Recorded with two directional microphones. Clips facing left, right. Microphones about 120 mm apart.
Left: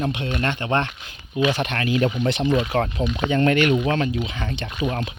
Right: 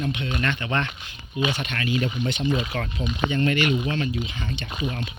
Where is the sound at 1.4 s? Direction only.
55° left (ahead or behind).